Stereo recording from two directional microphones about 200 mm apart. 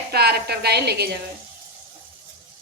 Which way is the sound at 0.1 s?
50° right (ahead or behind).